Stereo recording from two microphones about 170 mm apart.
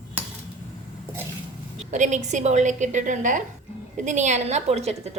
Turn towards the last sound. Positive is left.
turn(degrees=-40)  # may be behind; listen again after turning